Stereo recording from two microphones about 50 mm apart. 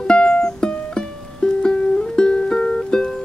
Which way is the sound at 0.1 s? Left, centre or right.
Centre.